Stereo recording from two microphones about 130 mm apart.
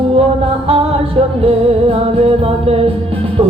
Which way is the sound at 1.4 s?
45° right (ahead or behind).